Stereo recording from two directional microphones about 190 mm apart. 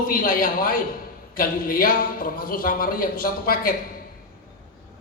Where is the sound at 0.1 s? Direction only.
50° left (ahead or behind).